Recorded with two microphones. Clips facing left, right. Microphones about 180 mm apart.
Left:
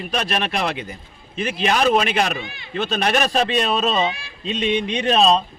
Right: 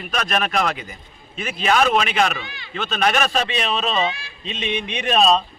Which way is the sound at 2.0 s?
40° left (ahead or behind).